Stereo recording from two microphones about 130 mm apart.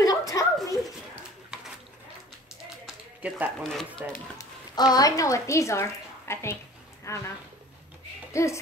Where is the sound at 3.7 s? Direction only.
5° left (ahead or behind).